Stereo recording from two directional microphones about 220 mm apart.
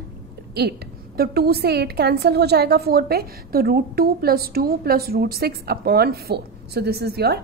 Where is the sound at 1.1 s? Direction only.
45° right (ahead or behind).